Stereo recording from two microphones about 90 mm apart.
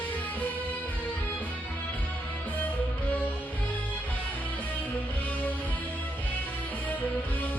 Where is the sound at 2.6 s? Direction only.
15° left (ahead or behind).